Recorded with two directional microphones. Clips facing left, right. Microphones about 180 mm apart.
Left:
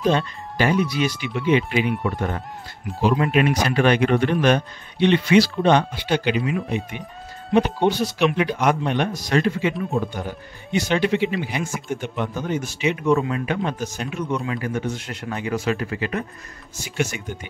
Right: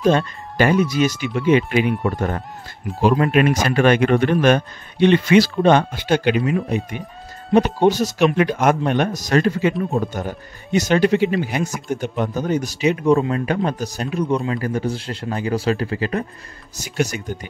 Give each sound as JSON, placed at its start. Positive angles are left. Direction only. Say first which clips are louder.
{"t": 0.0, "sound": "speech", "louder": "right 3 dB", "side_deg": -50}
{"t": 7.5, "sound": "speech", "louder": "right 3 dB", "side_deg": -40}